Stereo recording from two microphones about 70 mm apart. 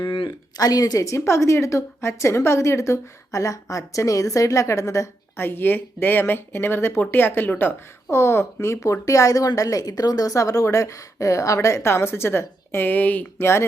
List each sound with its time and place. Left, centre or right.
0.3 s a woman's voice: left
5.4 s a woman's voice: left
13.4 s speech: left